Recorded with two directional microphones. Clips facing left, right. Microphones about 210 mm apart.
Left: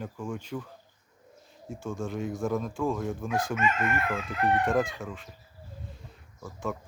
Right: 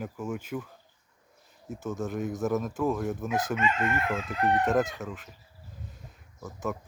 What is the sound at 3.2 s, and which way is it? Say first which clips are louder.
Chicken: left 1 dB; 20° right (ahead or behind).